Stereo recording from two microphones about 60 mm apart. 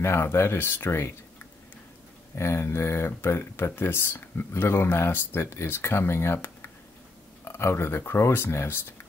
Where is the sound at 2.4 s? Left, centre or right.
Left.